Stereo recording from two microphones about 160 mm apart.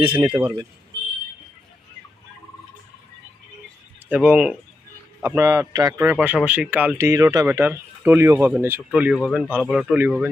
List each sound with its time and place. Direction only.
0.0 s a man's voice: 30° right (ahead or behind)
4.1 s speech: 10° right (ahead or behind)
5.2 s speech: 20° right (ahead or behind)